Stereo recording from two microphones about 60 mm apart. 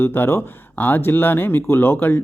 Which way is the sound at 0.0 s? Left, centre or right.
Left.